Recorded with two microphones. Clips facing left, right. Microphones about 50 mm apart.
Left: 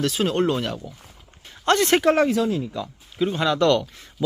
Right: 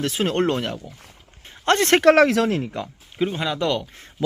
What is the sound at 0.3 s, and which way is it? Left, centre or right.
Speech, right.